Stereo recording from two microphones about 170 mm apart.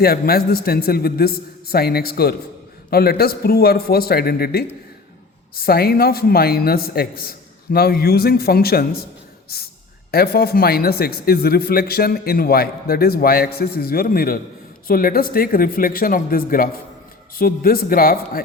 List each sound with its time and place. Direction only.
0.0 s a man's voice: 65° left (ahead or behind)